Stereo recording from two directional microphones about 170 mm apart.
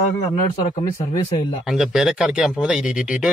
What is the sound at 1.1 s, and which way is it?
Speech, 25° left (ahead or behind).